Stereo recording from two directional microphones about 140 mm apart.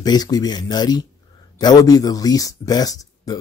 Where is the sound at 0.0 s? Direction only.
30° left (ahead or behind).